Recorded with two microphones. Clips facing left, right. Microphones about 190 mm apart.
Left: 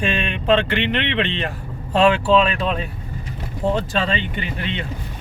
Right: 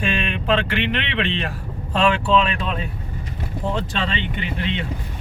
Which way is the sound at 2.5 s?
35° left (ahead or behind).